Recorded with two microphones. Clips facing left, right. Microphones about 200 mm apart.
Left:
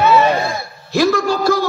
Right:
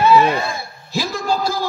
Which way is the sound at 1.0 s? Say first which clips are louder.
Left 6 dB; 60° left (ahead or behind).